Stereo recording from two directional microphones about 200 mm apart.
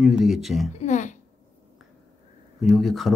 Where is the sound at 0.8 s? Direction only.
35° left (ahead or behind).